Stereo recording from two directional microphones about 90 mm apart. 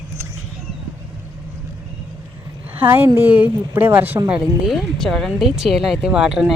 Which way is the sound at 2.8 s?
20° right (ahead or behind).